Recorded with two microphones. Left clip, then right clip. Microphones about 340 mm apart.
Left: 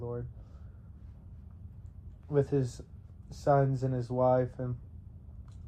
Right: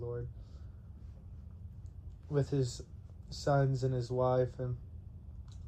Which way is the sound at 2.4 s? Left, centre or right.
Left.